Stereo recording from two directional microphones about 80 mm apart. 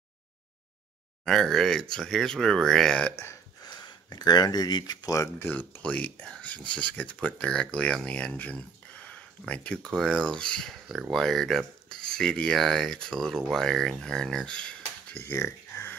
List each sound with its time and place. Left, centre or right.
1.2 s speech: centre
3.6 s speech: left
5.4 s speech: left
15.1 s a sound: left